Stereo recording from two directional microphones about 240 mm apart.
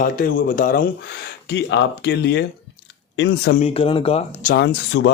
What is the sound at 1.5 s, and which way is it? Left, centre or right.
Speech, left.